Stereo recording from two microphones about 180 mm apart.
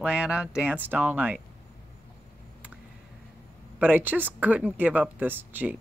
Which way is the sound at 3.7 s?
10° right (ahead or behind).